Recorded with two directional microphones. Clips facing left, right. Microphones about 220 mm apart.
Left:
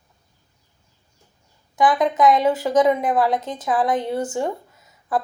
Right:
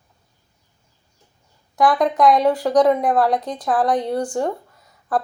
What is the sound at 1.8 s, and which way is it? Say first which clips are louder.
Speech: right 1 dB; centre (ahead or behind).